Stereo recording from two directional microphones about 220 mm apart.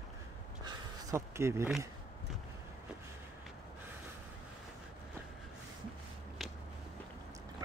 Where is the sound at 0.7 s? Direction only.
10° right (ahead or behind).